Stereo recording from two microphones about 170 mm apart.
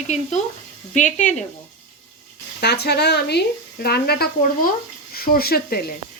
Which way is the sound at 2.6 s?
70° left (ahead or behind).